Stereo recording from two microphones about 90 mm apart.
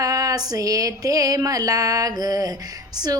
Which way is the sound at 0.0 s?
40° right (ahead or behind).